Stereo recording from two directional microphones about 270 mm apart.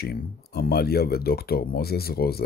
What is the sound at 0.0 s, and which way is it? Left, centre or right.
Speech, left.